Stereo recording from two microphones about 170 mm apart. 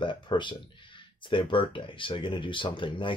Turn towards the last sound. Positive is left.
turn(degrees=30)  # may be behind; listen again after turning